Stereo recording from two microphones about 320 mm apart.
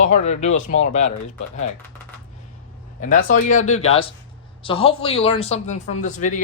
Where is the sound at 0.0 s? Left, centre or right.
Left.